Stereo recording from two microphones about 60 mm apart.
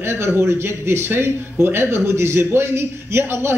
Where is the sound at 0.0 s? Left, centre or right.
Right.